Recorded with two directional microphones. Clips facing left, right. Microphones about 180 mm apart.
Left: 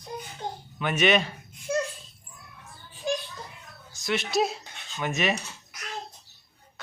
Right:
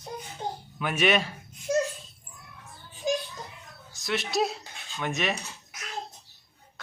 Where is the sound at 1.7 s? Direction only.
35° right (ahead or behind).